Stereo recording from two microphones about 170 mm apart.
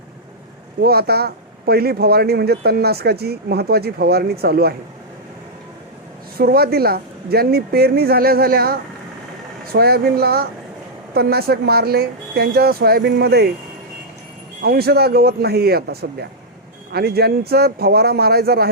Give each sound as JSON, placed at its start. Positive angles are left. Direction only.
{"t": 0.8, "sound": "speech", "side_deg": -65}
{"t": 6.3, "sound": "a woman's voice", "side_deg": -65}
{"t": 14.6, "sound": "speech", "side_deg": -65}